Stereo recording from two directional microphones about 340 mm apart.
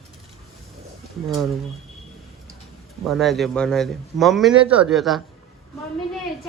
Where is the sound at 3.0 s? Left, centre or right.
Centre.